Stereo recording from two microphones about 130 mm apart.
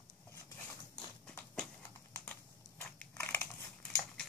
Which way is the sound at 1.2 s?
5° left (ahead or behind).